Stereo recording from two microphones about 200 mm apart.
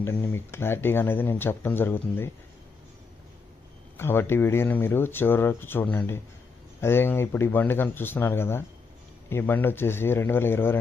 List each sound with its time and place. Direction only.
0.0 s speech: 10° left (ahead or behind)
3.9 s speech: 10° left (ahead or behind)